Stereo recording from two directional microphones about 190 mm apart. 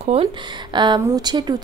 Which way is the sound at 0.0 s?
30° right (ahead or behind).